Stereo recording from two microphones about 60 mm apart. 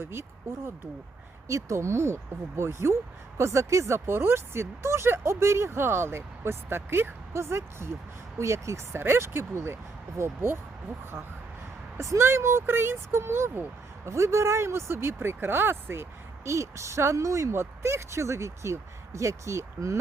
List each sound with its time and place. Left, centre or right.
0.0 s speech: right
1.5 s speech: right
11.9 s speech: right
17.5 s speech: right